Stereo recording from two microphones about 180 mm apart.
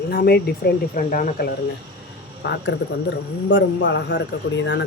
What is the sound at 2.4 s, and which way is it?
Speech, 80° left.